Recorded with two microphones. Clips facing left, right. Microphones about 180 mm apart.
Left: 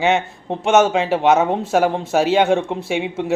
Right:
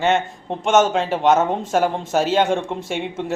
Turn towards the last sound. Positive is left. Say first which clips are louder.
# left 3 dB
turn(degrees=10)  # may be behind; listen again after turning